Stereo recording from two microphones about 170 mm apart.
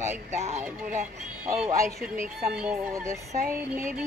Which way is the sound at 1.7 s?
15° right (ahead or behind).